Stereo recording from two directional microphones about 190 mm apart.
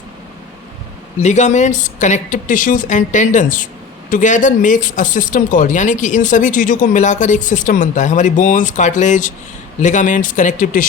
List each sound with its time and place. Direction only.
1.2 s speech: 40° left (ahead or behind)